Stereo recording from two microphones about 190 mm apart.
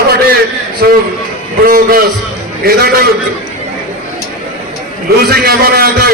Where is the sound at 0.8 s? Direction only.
55° right (ahead or behind).